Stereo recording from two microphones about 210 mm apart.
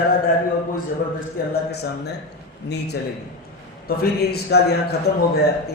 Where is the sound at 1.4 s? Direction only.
45° left (ahead or behind).